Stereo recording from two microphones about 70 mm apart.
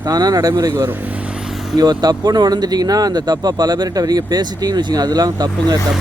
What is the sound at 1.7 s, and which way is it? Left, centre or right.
Speech, right.